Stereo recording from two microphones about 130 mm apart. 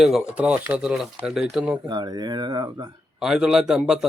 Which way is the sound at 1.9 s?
30° right (ahead or behind).